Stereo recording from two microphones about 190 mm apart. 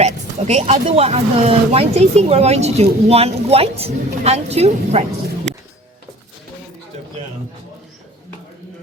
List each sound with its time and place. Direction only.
0.0 s speech: 35° right (ahead or behind)